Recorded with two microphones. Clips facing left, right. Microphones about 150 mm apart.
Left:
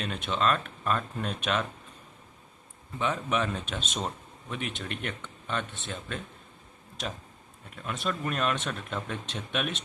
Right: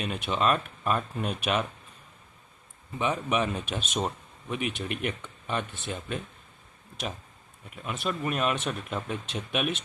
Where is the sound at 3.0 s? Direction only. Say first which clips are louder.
Right 2 dB; 10° right (ahead or behind).